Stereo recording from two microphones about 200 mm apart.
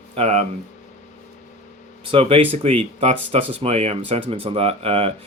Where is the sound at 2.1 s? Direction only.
30° right (ahead or behind).